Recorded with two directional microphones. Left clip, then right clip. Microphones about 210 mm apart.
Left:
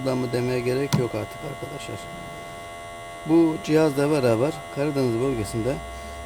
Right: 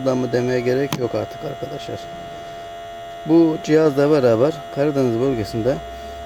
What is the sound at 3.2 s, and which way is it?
Speech, 10° right (ahead or behind).